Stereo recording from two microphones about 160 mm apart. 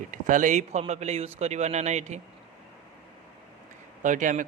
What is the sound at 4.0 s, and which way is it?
Speech, 50° right (ahead or behind).